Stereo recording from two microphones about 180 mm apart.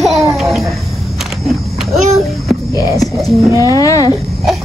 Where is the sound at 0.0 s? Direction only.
Centre (ahead or behind).